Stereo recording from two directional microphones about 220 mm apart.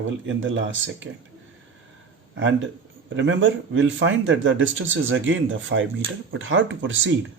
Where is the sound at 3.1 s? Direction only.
60° right (ahead or behind).